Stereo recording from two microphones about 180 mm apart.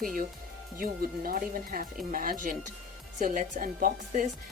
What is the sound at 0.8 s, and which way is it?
Speech, 55° right (ahead or behind).